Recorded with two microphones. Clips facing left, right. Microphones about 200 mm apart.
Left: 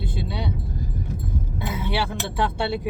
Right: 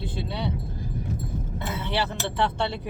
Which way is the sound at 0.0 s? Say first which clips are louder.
Left 1 dB; 10° left (ahead or behind).